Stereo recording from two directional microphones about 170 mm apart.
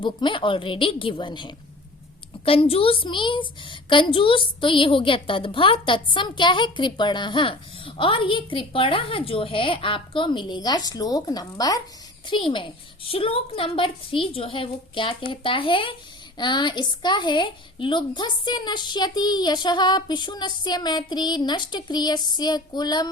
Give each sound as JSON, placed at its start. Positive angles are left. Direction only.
{"t": 0.0, "sound": "a woman's voice", "side_deg": 30}